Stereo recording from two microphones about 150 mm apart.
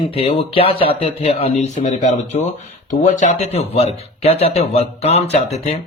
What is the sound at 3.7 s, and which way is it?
Speech, 40° left (ahead or behind).